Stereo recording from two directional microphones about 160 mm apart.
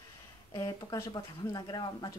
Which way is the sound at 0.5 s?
20° left (ahead or behind).